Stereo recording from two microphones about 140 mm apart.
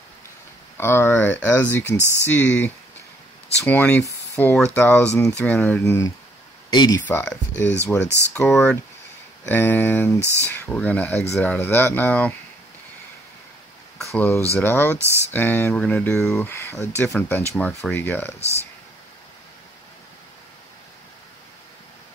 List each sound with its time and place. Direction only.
0.7 s speech: 15° left (ahead or behind)
2.0 s speech: 15° right (ahead or behind)
2.2 s speech: 15° left (ahead or behind)
6.7 s speech: 30° left (ahead or behind)
7.1 s speech: 10° left (ahead or behind)
8.5 s speech: 5° left (ahead or behind)
9.5 s speech: 15° left (ahead or behind)
10.2 s speech: 20° right (ahead or behind)
10.5 s speech: 10° left (ahead or behind)
14.1 s speech: 15° left (ahead or behind)
16.3 s speech: 20° left (ahead or behind)